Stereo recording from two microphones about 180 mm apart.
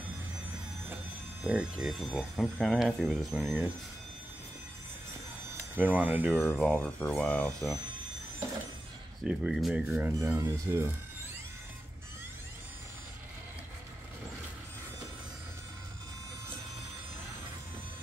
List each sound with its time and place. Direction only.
1.4 s speech: 5° right (ahead or behind)
5.8 s speech: 10° right (ahead or behind)
6.4 s speech: 5° left (ahead or behind)
9.2 s speech: 5° right (ahead or behind)